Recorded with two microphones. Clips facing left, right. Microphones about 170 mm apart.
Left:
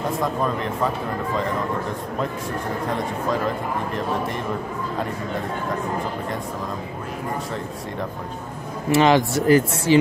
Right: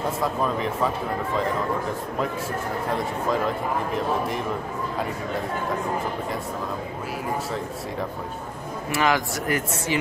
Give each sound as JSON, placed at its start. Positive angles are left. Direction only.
{"t": 0.2, "sound": "speech", "side_deg": -5}
{"t": 8.9, "sound": "speech", "side_deg": 25}